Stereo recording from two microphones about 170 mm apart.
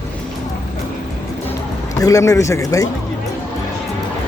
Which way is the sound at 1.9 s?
20° left (ahead or behind).